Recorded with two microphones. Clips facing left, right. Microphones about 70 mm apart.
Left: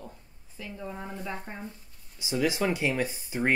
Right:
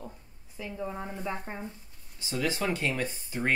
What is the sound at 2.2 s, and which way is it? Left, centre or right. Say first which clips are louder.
Speech: left 3 dB; centre.